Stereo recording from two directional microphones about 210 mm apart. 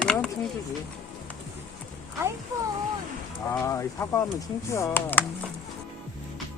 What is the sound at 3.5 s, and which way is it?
Speech, 15° left (ahead or behind).